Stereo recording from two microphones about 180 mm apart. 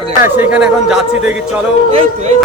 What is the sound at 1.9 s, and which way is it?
Speech, 40° right (ahead or behind).